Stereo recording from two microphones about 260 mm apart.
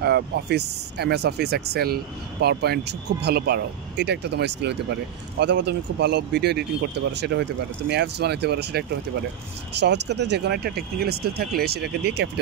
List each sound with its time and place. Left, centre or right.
0.0 s speech: right
10.0 s speech: right